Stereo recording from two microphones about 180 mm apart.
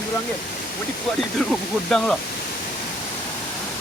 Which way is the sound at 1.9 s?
5° left (ahead or behind).